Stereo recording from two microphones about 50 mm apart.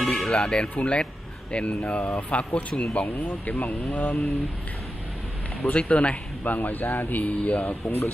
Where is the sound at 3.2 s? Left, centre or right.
Left.